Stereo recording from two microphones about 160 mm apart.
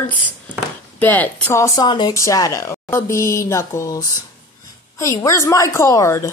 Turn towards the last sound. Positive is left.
turn(degrees=20)  # may be behind; listen again after turning